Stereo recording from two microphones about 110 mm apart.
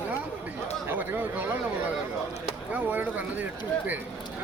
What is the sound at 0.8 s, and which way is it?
Speech, 15° right (ahead or behind).